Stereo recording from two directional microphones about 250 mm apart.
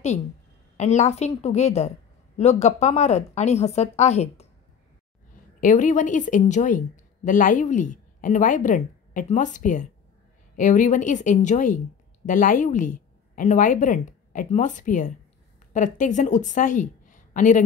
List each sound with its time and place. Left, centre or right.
0.7 s speech: left
5.6 s a woman's voice: left